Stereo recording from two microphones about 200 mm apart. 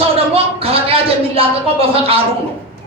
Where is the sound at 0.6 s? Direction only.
30° right (ahead or behind).